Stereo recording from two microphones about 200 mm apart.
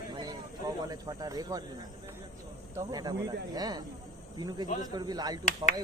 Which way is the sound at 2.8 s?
20° right (ahead or behind).